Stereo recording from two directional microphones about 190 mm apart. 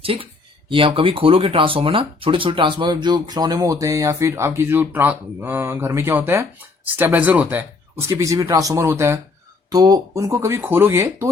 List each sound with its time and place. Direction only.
0.0 s speech: 30° right (ahead or behind); by 11.3 s 15° right (ahead or behind)